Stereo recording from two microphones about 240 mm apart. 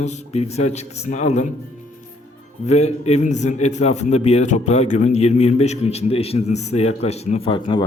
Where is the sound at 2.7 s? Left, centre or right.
Left.